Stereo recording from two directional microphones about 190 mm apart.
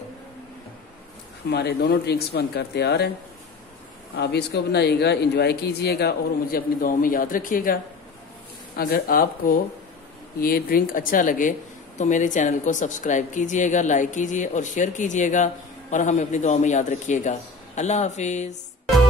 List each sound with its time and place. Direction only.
1.5 s speech: 60° left (ahead or behind)
4.2 s a woman's voice: 60° left (ahead or behind); by 18.5 s 40° left (ahead or behind)